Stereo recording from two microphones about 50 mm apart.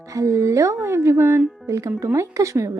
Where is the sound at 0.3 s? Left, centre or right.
Right.